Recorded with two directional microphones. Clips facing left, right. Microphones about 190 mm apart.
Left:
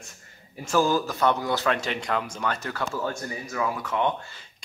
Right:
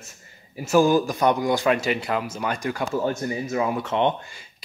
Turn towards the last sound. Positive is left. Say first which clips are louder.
# right 4 dB
turn(degrees=-25)  # may be behind; listen again after turning